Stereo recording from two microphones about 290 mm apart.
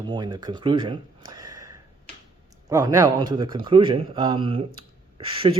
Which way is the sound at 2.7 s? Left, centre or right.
Centre.